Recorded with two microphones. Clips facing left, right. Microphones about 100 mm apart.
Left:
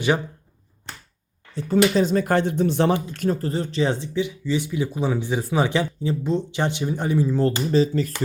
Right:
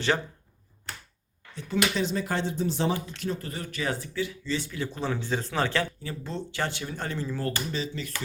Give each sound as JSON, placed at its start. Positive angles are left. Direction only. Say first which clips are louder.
{"t": 1.5, "sound": "speech", "louder": "left 9 dB", "side_deg": 40}
{"t": 7.7, "sound": "speech", "louder": "left 13 dB", "side_deg": 40}